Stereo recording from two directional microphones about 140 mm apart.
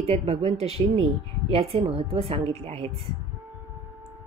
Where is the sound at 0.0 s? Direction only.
45° right (ahead or behind).